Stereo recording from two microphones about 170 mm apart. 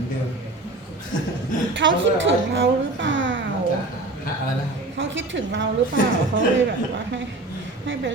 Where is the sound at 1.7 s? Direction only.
90° right.